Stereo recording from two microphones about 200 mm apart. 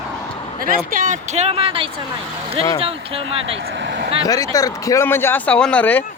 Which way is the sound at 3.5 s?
65° right (ahead or behind).